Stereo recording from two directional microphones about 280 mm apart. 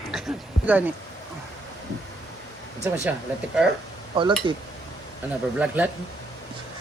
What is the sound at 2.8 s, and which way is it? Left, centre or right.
Speech, centre.